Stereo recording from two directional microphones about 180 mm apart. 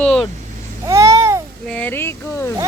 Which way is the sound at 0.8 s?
15° right (ahead or behind).